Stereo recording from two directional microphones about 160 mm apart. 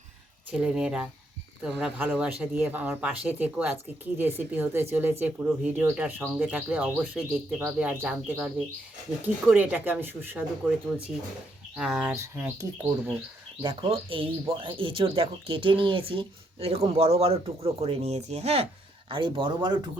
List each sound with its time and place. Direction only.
0.5 s speech: 5° right (ahead or behind)
12.1 s speech: 15° right (ahead or behind)
13.6 s speech: 30° right (ahead or behind)